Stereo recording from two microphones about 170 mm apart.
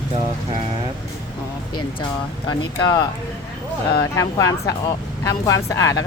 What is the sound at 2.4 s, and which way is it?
Speech, 25° left (ahead or behind).